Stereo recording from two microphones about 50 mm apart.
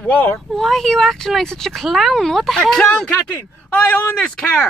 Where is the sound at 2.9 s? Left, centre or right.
Centre.